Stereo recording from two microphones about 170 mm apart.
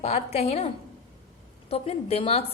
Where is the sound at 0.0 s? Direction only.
40° left (ahead or behind).